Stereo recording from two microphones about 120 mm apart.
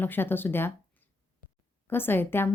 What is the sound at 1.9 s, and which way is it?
Speech, 20° left (ahead or behind).